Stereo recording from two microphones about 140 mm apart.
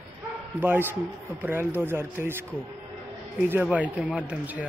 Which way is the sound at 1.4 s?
15° right (ahead or behind).